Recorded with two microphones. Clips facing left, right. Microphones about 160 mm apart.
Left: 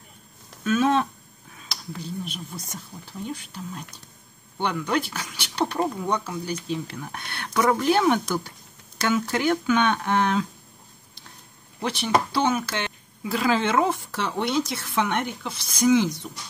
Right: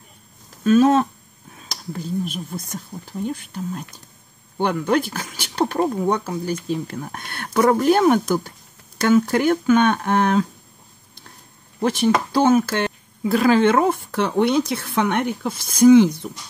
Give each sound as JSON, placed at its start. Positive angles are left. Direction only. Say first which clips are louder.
{"t": 0.7, "sound": "speech", "louder": "right 7 dB", "side_deg": -40}
{"t": 11.8, "sound": "speech", "louder": "right 5 dB", "side_deg": -45}